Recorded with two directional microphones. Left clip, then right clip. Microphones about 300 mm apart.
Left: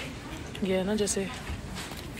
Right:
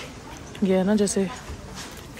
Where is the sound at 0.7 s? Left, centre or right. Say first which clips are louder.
Right 6 dB; right.